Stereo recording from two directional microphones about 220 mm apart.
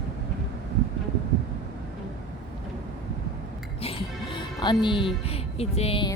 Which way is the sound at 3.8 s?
20° left (ahead or behind).